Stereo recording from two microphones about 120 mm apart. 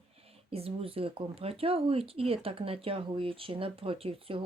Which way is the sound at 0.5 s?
55° right (ahead or behind).